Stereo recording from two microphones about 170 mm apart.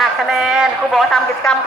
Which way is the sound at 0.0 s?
Centre (ahead or behind).